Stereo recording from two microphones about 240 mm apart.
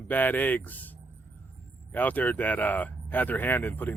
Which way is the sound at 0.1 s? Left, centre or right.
Centre.